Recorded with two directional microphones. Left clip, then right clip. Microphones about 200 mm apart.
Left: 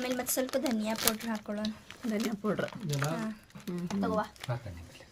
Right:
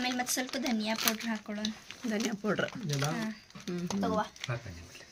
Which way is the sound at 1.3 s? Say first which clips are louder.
Left 1 dB; 45° left (ahead or behind).